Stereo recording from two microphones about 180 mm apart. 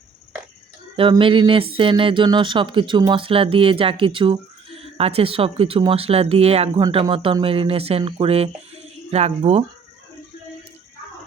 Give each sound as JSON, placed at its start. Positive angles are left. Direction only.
{"t": 1.2, "sound": "speech", "side_deg": -30}